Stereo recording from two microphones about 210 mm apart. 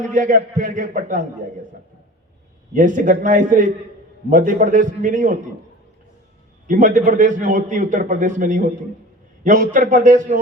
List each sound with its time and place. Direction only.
0.1 s a man's voice: 40° right (ahead or behind)
2.7 s a man's voice: 40° right (ahead or behind)
6.7 s a man's voice: 40° right (ahead or behind)